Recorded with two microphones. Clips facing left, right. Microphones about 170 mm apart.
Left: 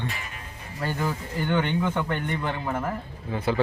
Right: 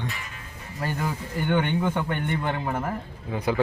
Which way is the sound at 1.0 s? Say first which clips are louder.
Even; 10° right (ahead or behind).